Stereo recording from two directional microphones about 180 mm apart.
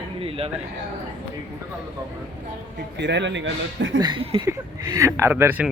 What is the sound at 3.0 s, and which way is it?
Speech, 75° right (ahead or behind).